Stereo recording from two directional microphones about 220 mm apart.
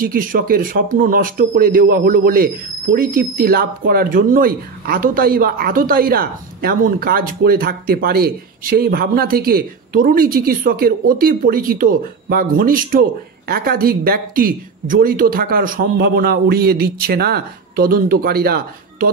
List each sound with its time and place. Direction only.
0.0 s speech: 40° right (ahead or behind)